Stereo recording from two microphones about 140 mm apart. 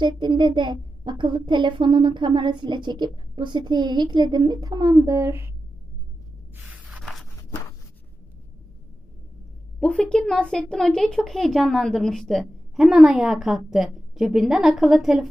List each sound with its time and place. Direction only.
0.0 s a woman's voice: 35° right (ahead or behind)
6.8 s a sound: centre (ahead or behind)
9.8 s speech: 5° left (ahead or behind)